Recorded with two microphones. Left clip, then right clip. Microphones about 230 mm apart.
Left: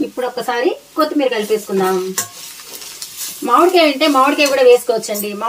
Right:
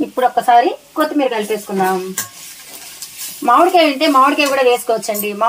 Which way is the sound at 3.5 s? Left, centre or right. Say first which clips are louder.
Right 1 dB; right.